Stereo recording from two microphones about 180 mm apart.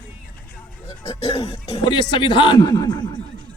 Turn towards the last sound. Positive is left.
turn(degrees=20)  # may be behind; listen again after turning